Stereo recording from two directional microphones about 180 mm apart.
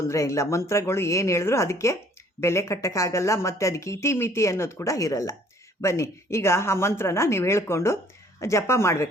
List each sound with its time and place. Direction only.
0.0 s speech: 15° left (ahead or behind)